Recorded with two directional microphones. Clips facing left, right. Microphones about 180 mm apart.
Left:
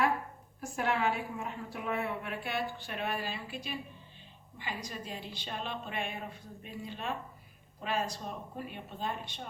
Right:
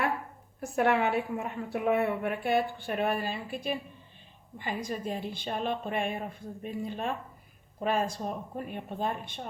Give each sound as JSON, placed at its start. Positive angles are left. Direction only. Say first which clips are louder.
{"t": 0.6, "sound": "a woman's voice", "louder": "right 6 dB", "side_deg": -60}